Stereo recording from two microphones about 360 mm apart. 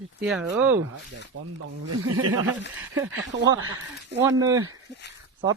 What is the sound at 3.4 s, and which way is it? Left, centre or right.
Speech, right.